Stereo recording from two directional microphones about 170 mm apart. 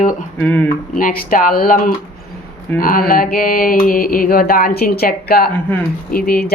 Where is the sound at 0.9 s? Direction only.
55° left (ahead or behind).